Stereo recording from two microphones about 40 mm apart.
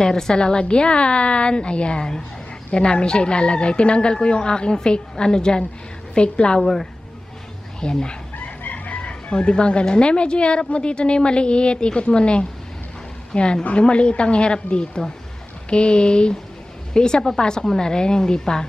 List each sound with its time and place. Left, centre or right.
0.0 s speech: centre
6.6 s speech: centre
7.8 s speech: centre
8.4 s a woman's voice: left; by 18.7 s centre